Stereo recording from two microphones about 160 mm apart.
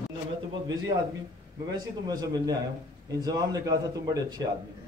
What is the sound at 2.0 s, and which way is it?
A man's voice, 25° right (ahead or behind).